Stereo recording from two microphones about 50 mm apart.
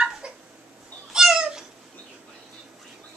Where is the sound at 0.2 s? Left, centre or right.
Centre.